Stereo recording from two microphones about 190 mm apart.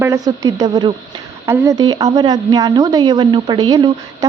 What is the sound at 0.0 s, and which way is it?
A woman's voice, 20° right (ahead or behind).